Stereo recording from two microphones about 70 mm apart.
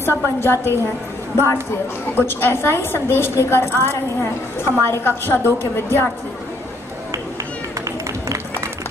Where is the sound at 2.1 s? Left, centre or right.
Left.